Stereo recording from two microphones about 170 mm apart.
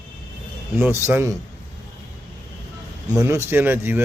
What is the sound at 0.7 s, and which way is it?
Speech, 15° right (ahead or behind).